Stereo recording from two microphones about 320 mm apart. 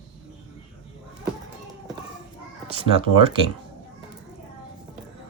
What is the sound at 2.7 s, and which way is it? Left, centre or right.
Speech, centre.